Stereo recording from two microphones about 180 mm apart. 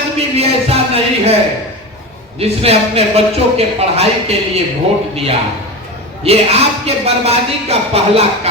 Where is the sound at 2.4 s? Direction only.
35° right (ahead or behind).